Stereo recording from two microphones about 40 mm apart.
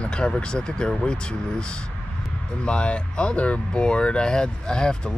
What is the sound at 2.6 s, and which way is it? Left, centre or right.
Speech, left.